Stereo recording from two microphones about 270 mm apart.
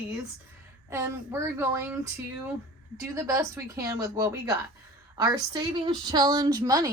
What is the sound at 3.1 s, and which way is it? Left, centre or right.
A woman's voice, centre.